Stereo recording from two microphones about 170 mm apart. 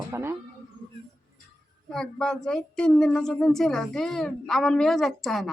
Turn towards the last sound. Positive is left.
turn(degrees=0)  # may be behind; listen again after turning